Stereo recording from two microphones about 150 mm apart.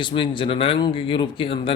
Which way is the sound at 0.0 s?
35° left (ahead or behind).